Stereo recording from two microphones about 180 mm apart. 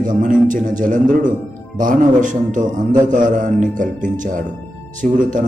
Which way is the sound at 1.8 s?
45° right (ahead or behind).